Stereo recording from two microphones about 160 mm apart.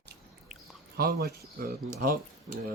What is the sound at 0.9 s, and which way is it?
Speech, 75° right (ahead or behind).